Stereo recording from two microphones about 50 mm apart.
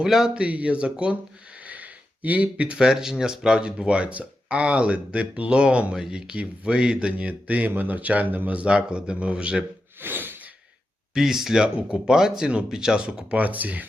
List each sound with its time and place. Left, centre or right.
0.0 s speech: centre
0.3 s speech: right
1.6 s a sound: right
2.7 s speech: centre
7.1 s speech: right
10.0 s gasp: right
11.1 s speech: centre; by 13.8 s right